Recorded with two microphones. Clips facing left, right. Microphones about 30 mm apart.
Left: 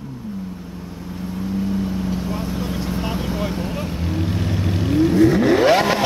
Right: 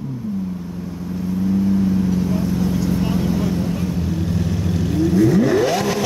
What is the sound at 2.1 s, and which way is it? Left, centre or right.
Vehicle, left.